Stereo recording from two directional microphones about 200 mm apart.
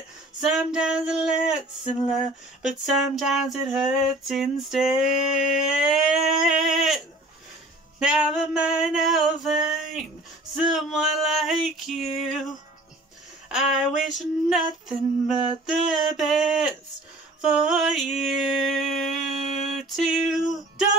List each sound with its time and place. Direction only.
0.4 s female singing: 5° right (ahead or behind)
5.0 s a sound: 40° left (ahead or behind)
5.8 s female singing: 5° right (ahead or behind)
8.0 s female singing: 5° right (ahead or behind)
13.5 s female singing: 5° right (ahead or behind)